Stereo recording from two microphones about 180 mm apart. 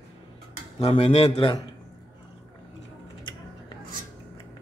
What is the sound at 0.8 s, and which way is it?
Speech, 35° left (ahead or behind).